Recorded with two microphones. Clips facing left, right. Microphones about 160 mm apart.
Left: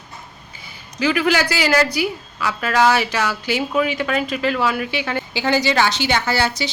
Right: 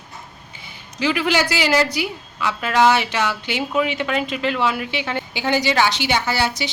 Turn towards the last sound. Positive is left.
turn(degrees=-15)  # may be behind; listen again after turning